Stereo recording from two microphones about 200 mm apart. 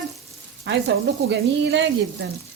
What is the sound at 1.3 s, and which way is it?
Speech, 60° right (ahead or behind).